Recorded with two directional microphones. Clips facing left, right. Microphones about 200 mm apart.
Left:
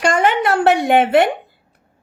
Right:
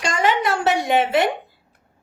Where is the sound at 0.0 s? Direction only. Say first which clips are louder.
Left 4 dB; 60° left (ahead or behind).